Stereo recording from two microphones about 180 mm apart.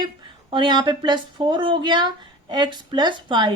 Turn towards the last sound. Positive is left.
turn(degrees=-25)  # may be behind; listen again after turning